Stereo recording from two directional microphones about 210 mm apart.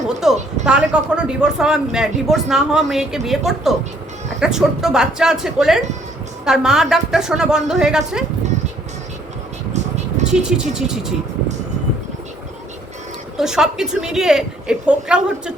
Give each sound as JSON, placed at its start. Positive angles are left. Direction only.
{"t": 0.2, "sound": "speech", "side_deg": 0}
{"t": 10.2, "sound": "vehicle", "side_deg": -35}
{"t": 10.8, "sound": "speech", "side_deg": 0}
{"t": 13.3, "sound": "speech", "side_deg": 0}